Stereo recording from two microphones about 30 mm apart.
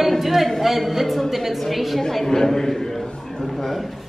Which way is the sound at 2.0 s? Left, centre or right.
Centre.